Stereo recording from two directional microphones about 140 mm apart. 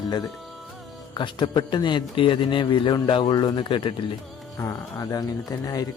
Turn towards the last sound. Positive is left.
turn(degrees=25)  # may be behind; listen again after turning